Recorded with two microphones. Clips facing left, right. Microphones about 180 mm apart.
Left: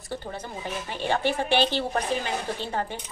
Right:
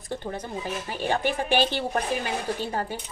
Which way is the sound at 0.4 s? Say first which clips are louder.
Right 2 dB; 10° right (ahead or behind).